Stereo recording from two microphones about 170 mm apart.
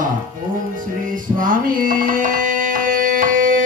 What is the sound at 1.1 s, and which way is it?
Music, 50° right (ahead or behind).